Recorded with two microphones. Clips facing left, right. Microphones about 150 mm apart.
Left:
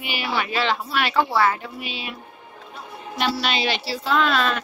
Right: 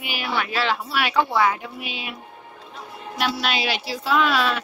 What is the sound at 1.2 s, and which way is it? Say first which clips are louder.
Speech: even; 5° left (ahead or behind).